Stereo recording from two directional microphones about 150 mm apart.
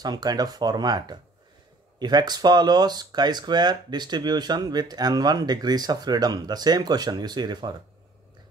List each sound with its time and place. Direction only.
0.0 s speech: 25° right (ahead or behind)